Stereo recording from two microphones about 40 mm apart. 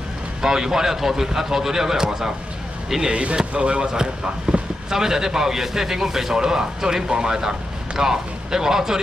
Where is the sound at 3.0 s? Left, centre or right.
Right.